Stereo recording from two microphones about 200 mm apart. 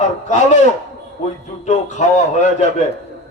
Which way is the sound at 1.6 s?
35° left (ahead or behind).